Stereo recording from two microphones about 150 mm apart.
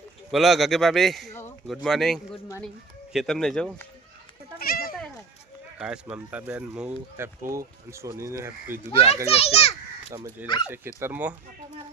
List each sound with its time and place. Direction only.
0.3 s a man's voice: centre (ahead or behind)
4.5 s a sound: 80° left
5.8 s a man's voice: 5° right (ahead or behind)
9.2 s a child's voice: 45° left (ahead or behind)
10.1 s speech: 20° right (ahead or behind)